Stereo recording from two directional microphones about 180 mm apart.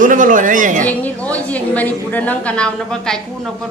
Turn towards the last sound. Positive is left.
turn(degrees=5)  # may be behind; listen again after turning